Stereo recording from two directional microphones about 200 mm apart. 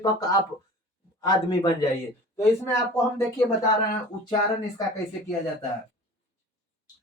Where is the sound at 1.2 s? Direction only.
20° left (ahead or behind).